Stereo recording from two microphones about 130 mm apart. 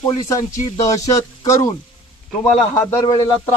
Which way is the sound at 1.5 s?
25° left (ahead or behind).